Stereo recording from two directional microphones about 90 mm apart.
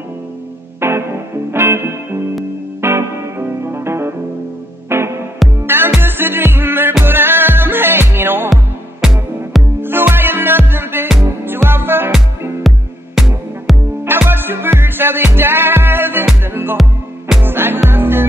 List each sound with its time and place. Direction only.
0.7 s music: 25° right (ahead or behind)
9.0 s music: 5° right (ahead or behind)
9.8 s music: 25° right (ahead or behind)
12.6 s music: 5° right (ahead or behind)
14.0 s music: 25° right (ahead or behind)
16.8 s music: centre (ahead or behind)
17.4 s music: 25° right (ahead or behind)